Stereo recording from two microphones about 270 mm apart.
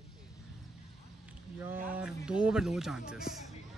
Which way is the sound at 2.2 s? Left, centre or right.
Centre.